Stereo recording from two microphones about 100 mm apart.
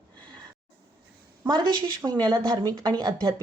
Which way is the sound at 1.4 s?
45° right (ahead or behind).